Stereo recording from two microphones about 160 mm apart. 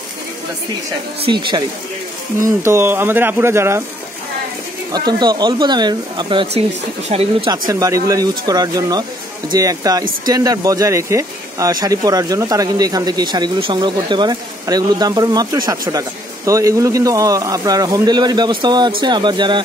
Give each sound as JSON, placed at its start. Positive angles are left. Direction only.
{"t": 2.4, "sound": "speech", "side_deg": -15}
{"t": 4.9, "sound": "speech", "side_deg": -25}
{"t": 7.4, "sound": "speech", "side_deg": -25}